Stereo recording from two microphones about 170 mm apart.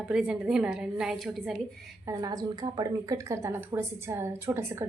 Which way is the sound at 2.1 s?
20° right (ahead or behind).